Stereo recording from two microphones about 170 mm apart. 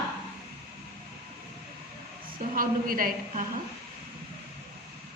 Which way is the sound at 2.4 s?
55° right (ahead or behind).